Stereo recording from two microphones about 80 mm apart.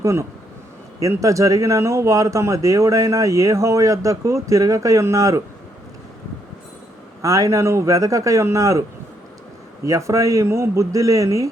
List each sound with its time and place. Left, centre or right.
0.0 s speech: right
7.2 s speech: right
9.8 s speech: right